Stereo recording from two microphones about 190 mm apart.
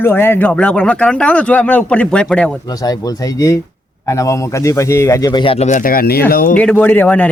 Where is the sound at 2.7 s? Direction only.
20° left (ahead or behind); by 6.5 s 45° left (ahead or behind).